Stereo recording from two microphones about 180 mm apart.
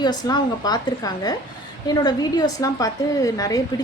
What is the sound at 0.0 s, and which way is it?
A woman's voice, 25° left (ahead or behind).